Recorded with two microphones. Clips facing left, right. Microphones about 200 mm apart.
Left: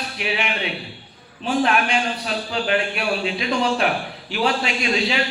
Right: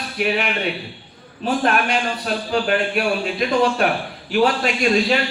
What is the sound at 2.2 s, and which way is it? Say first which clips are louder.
A man's voice: right 3 dB; 50° right (ahead or behind).